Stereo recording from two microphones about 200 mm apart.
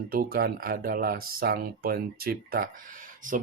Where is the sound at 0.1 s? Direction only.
50° right (ahead or behind).